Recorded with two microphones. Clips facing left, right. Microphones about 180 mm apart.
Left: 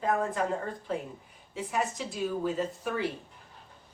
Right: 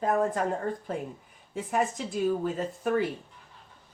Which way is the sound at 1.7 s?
50° right (ahead or behind).